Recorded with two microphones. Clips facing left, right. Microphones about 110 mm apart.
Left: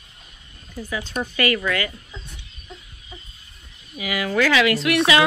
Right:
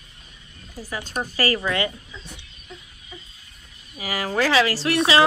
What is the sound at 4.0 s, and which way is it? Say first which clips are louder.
Speech: left 2 dB; 35° right (ahead or behind).